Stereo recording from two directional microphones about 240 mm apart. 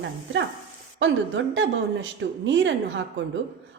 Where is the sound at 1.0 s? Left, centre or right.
Right.